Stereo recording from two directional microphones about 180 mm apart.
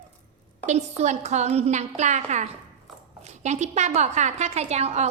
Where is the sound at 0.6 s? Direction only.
40° right (ahead or behind).